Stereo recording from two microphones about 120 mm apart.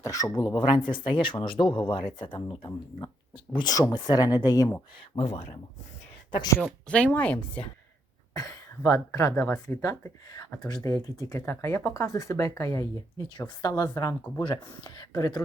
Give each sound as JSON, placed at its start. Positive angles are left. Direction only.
{"t": 0.0, "sound": "speech", "side_deg": 30}
{"t": 5.1, "sound": "speech", "side_deg": 60}
{"t": 6.8, "sound": "speech", "side_deg": 10}
{"t": 8.3, "sound": "speech", "side_deg": 30}
{"t": 14.4, "sound": "speech", "side_deg": 40}